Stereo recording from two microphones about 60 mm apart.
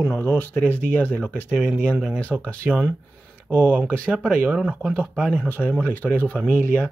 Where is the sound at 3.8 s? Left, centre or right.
Centre.